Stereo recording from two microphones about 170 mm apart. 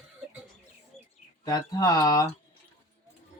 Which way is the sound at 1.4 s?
25° left (ahead or behind).